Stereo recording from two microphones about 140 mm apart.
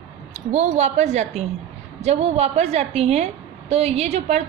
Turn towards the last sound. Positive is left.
turn(degrees=-50)  # may be behind; listen again after turning